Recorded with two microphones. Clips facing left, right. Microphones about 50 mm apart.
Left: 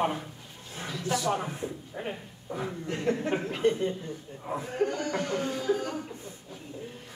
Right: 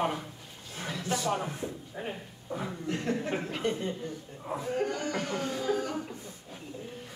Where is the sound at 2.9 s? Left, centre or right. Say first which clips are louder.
Left 3 dB; left.